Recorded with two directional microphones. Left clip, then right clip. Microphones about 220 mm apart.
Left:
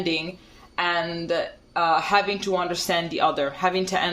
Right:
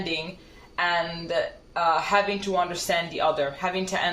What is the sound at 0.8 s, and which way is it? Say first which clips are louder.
Speech: left 1 dB; 50° left (ahead or behind).